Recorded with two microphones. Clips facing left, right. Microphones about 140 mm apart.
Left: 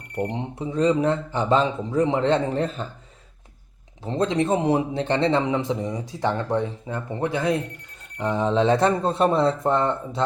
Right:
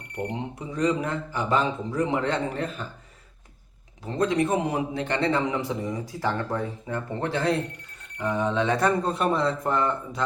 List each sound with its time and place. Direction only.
0.8 s a man's voice: 25° left (ahead or behind)
4.0 s a man's voice: 25° left (ahead or behind)
8.2 s a man's voice: 25° left (ahead or behind)